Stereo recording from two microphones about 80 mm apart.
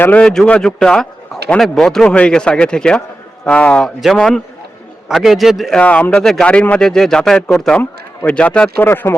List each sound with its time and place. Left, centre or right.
0.2 s a man's voice: centre
3.8 s a man's voice: centre
5.7 s a man's voice: centre
8.8 s speech: left